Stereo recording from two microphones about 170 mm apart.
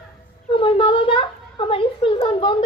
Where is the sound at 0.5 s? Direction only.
30° left (ahead or behind).